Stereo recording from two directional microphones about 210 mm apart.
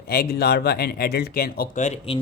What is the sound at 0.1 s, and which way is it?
Speech, 45° left (ahead or behind).